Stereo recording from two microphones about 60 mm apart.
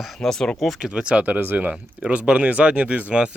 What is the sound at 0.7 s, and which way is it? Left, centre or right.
Speech, centre.